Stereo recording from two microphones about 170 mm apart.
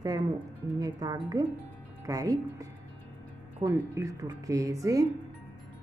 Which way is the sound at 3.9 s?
20° right (ahead or behind).